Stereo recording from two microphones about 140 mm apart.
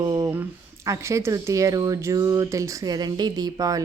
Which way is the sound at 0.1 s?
20° right (ahead or behind).